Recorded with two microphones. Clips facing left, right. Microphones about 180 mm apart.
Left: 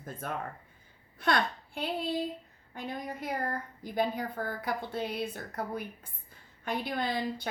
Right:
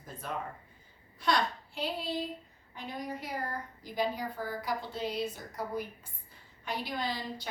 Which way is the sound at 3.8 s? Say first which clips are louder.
Left 2 dB; 55° left (ahead or behind).